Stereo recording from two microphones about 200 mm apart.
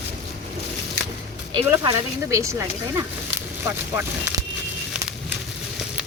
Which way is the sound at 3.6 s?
10° right (ahead or behind).